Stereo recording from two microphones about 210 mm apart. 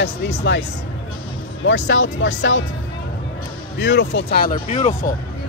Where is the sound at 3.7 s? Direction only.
55° left (ahead or behind).